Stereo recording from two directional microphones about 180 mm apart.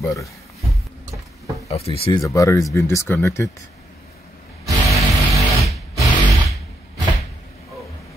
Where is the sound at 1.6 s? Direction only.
35° left (ahead or behind).